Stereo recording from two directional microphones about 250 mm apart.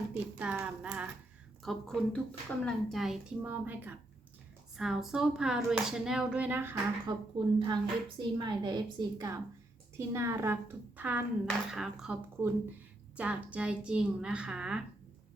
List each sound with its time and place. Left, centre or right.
0.3 s speech: centre